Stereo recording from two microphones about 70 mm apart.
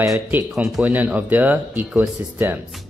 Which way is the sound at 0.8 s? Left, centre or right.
Right.